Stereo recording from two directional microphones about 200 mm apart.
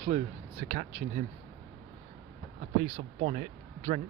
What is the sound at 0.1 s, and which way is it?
Speech, 35° right (ahead or behind).